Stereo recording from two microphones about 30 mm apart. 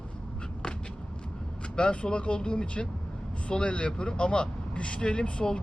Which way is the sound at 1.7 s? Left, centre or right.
Left.